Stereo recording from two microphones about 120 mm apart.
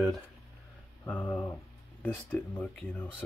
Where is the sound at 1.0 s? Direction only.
15° left (ahead or behind).